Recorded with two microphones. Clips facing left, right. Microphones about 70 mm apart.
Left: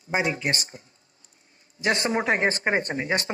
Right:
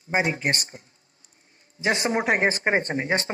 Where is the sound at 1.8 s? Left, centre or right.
Right.